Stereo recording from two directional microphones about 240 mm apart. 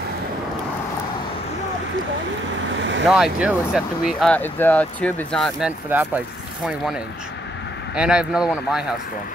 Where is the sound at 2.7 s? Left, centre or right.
Right.